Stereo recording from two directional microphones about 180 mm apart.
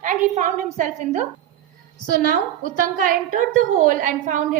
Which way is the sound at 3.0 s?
50° right (ahead or behind).